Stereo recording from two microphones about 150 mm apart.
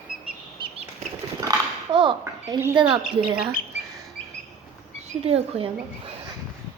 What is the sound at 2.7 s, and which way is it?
Speech, 30° right (ahead or behind).